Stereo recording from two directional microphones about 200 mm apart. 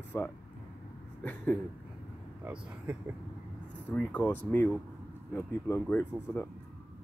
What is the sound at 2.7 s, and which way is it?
Speech, 5° right (ahead or behind).